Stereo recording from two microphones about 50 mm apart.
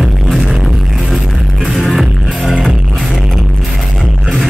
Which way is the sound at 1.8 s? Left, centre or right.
Centre.